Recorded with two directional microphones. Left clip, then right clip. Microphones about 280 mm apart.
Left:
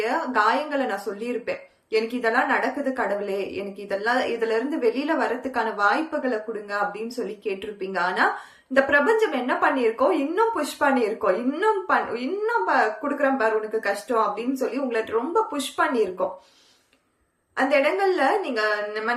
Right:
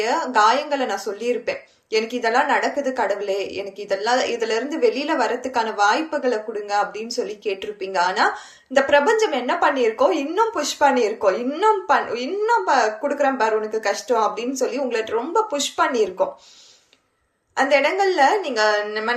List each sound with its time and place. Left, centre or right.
0.0 s a woman's voice: centre
17.6 s speech: centre